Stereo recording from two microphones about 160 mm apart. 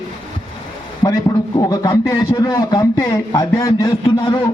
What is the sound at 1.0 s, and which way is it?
A man's voice, 25° left (ahead or behind).